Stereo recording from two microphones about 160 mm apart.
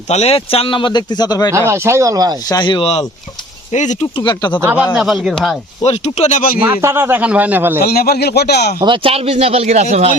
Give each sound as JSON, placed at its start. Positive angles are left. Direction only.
{"t": 0.1, "sound": "speech", "side_deg": 40}
{"t": 1.5, "sound": "speech", "side_deg": -15}
{"t": 2.5, "sound": "speech", "side_deg": 30}
{"t": 3.7, "sound": "speech", "side_deg": 50}
{"t": 4.2, "sound": "speech", "side_deg": 30}
{"t": 4.6, "sound": "a man's voice", "side_deg": -10}
{"t": 5.8, "sound": "speech", "side_deg": 40}
{"t": 6.6, "sound": "a man's voice", "side_deg": -15}
{"t": 7.8, "sound": "speech", "side_deg": 75}
{"t": 8.8, "sound": "speech", "side_deg": -35}